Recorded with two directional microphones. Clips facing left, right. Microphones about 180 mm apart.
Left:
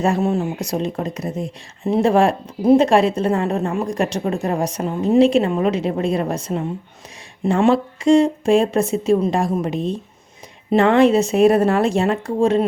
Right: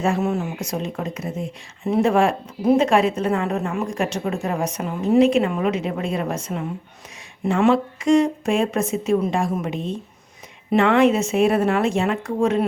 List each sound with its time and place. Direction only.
0.0 s a woman's voice: 35° left (ahead or behind)